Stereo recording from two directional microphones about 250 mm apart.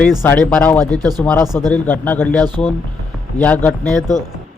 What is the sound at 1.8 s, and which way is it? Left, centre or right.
A man's voice, centre.